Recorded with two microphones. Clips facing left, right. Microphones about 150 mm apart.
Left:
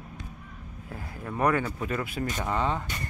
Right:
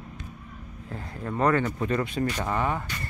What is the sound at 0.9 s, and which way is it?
Speech, 10° left (ahead or behind).